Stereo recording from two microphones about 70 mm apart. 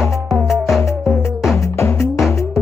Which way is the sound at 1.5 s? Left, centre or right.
Left.